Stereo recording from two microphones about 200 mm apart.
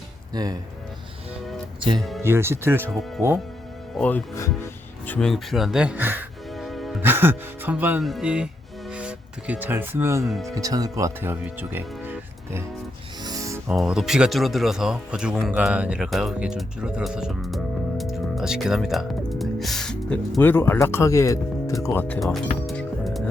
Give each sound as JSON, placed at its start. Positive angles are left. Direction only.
{"t": 0.3, "sound": "speech", "side_deg": -20}
{"t": 2.0, "sound": "speech", "side_deg": 0}
{"t": 2.2, "sound": "speech", "side_deg": -10}
{"t": 3.9, "sound": "speech", "side_deg": 5}
{"t": 7.0, "sound": "speech", "side_deg": -10}
{"t": 10.2, "sound": "speech", "side_deg": 0}
{"t": 10.5, "sound": "speech", "side_deg": -15}
{"t": 13.2, "sound": "music", "side_deg": -15}
{"t": 13.7, "sound": "speech", "side_deg": 0}